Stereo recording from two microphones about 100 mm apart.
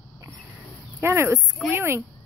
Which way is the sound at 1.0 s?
25° right (ahead or behind).